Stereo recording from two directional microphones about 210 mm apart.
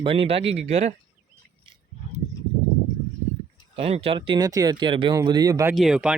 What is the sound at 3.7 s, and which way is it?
Speech, 30° right (ahead or behind).